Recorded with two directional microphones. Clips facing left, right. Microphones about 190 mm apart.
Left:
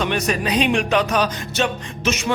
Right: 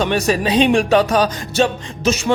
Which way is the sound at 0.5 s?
30° right (ahead or behind).